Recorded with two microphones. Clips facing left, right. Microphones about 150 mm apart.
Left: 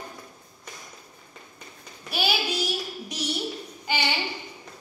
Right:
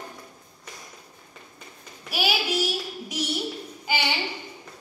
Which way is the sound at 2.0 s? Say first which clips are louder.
Right 1 dB; 5° right (ahead or behind).